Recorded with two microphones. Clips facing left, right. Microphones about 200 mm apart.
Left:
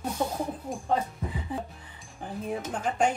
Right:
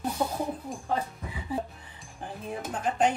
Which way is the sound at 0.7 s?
Centre (ahead or behind).